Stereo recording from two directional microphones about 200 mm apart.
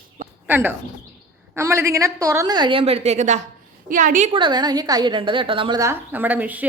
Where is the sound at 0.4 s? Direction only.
10° right (ahead or behind); by 4.3 s 40° right (ahead or behind).